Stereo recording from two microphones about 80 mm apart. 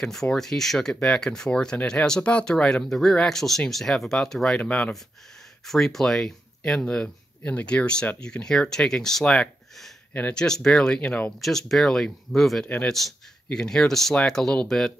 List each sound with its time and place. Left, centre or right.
0.0 s speech: centre
4.6 s speech: centre
4.9 s speech: centre
11.3 s speech: centre
12.6 s speech: centre
12.9 s speech: centre